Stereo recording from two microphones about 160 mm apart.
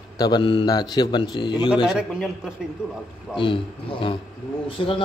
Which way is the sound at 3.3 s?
30° left (ahead or behind).